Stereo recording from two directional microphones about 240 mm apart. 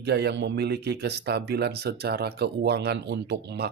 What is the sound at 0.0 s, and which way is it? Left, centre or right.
A man's voice, right.